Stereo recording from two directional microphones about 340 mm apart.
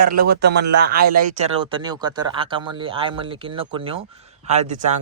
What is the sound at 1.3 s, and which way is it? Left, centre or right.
A man's voice, centre.